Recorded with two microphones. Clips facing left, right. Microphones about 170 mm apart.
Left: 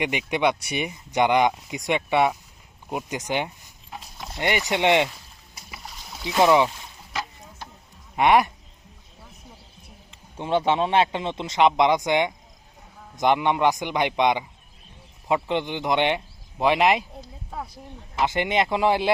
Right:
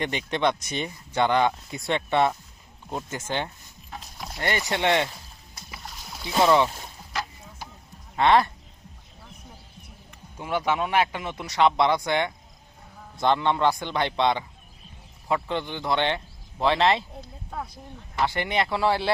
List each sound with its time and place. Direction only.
0.0 s speech: 10° left (ahead or behind)
5.5 s boat: 5° left (ahead or behind)
6.2 s speech: 15° left (ahead or behind)
7.1 s a sound: centre (ahead or behind)
8.1 s speech: 15° left (ahead or behind)
10.1 s speech: 25° left (ahead or behind)
17.5 s speech: 5° left (ahead or behind)
18.2 s speech: 20° left (ahead or behind)